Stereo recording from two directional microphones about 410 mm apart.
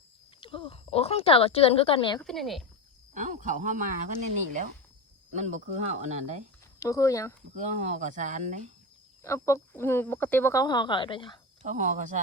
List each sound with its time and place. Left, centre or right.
0.3 s speech: centre
2.2 s speech: centre
3.2 s speech: centre
5.3 s speech: centre
6.7 s speech: centre
7.6 s speech: centre
9.2 s speech: centre
11.6 s speech: centre